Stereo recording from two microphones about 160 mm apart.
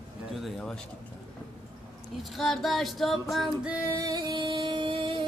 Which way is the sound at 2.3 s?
Centre (ahead or behind).